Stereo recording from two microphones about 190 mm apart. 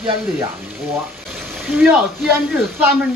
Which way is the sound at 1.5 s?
5° right (ahead or behind).